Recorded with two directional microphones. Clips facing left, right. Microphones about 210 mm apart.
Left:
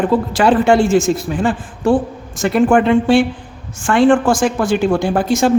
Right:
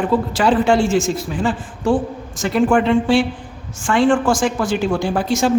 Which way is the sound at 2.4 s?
55° left (ahead or behind).